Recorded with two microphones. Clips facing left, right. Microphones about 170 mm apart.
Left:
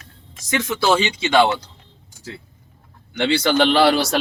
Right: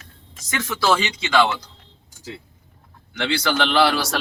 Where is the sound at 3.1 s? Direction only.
30° left (ahead or behind).